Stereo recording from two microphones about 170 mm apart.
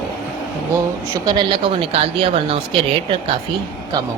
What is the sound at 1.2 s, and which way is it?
Speech, 25° right (ahead or behind).